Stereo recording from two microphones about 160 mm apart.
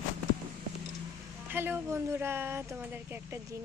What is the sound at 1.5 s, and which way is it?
Speech, 15° right (ahead or behind).